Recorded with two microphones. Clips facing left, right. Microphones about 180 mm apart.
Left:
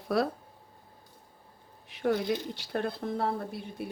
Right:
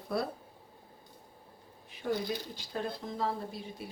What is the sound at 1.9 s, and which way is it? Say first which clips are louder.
Speech: left 5 dB; 75° left (ahead or behind).